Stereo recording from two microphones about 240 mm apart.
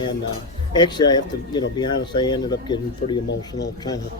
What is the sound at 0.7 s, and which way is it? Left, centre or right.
Speech, centre.